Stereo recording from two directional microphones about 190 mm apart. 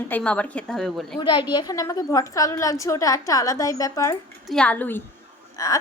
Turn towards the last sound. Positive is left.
turn(degrees=15)  # may be behind; listen again after turning